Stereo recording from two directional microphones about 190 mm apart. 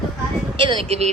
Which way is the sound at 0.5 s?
25° right (ahead or behind).